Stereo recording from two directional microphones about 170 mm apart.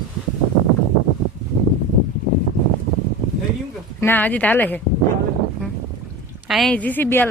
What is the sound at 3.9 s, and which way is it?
Speech, 10° left (ahead or behind).